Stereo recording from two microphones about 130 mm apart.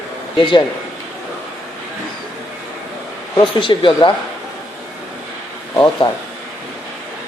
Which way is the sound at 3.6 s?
40° left (ahead or behind).